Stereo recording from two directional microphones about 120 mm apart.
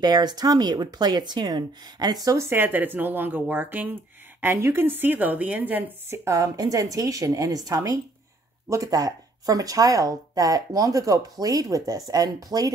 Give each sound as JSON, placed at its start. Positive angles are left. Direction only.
{"t": 0.0, "sound": "speech", "side_deg": -35}